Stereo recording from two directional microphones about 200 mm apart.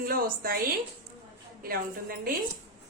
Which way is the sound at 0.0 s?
45° right (ahead or behind).